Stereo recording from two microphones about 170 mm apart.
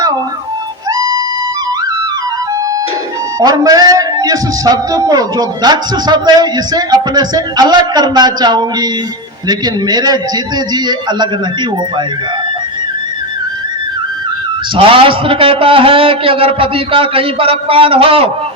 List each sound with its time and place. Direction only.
0.9 s music: 25° right (ahead or behind)
3.4 s a man's voice: 20° right (ahead or behind)
14.8 s a man's voice: 30° right (ahead or behind)